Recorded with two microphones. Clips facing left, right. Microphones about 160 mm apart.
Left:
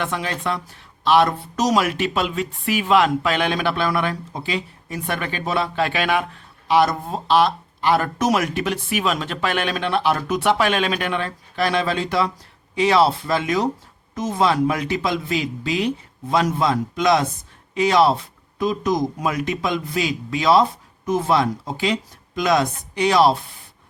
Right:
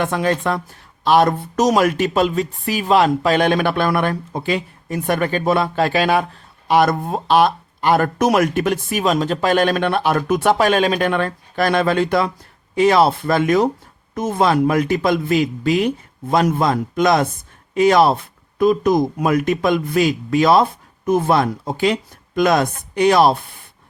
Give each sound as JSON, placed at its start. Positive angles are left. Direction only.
{"t": 0.0, "sound": "speech", "side_deg": -45}
{"t": 6.7, "sound": "speech", "side_deg": -50}